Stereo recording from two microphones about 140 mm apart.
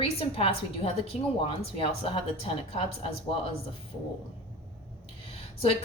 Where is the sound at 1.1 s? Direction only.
55° left (ahead or behind).